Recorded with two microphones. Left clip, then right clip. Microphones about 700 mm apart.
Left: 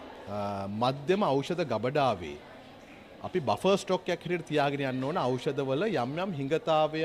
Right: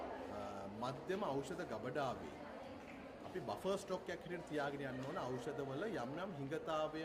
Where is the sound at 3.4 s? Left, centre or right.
Left.